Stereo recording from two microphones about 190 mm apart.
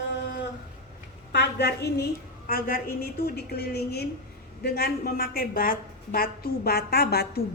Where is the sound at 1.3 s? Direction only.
60° left (ahead or behind).